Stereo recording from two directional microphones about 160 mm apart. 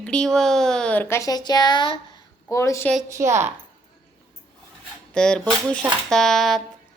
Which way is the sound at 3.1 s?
20° right (ahead or behind).